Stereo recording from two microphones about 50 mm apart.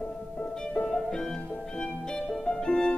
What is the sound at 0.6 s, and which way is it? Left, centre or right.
Music, centre.